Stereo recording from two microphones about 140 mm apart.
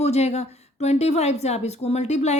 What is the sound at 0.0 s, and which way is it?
A woman's voice, 50° left (ahead or behind).